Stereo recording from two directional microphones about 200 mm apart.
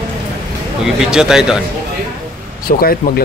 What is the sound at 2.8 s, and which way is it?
Speech, 50° left (ahead or behind).